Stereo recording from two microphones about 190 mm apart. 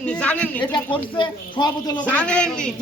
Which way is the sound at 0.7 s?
25° left (ahead or behind).